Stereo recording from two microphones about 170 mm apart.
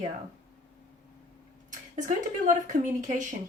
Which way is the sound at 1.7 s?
50° right (ahead or behind).